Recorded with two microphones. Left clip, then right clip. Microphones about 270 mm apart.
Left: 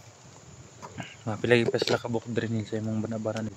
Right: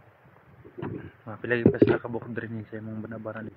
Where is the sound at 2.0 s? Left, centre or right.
Centre.